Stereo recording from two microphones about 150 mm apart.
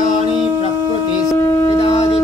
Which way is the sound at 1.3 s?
15° left (ahead or behind).